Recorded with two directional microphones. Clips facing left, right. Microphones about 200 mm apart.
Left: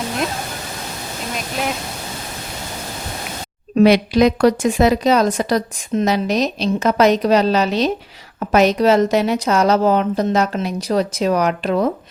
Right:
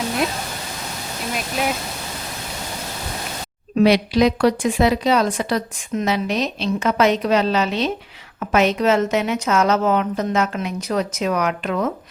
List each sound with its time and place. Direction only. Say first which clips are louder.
3.8 s a woman's voice: left 3 dB; 50° left (ahead or behind)